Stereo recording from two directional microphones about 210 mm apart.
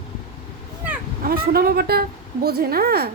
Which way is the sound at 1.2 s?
45° right (ahead or behind).